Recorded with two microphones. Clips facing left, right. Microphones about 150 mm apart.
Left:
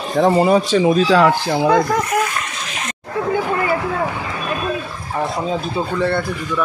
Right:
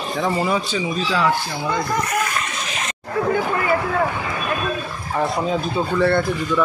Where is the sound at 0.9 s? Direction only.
70° left (ahead or behind).